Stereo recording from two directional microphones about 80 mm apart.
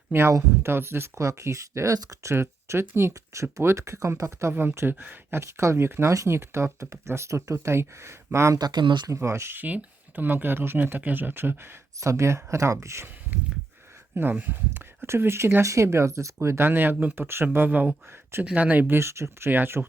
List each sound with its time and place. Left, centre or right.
0.1 s speech: right
2.3 s speech: right
8.5 s speech: right
9.0 s speech: right
11.9 s speech: right
13.3 s speech: right
18.9 s speech: right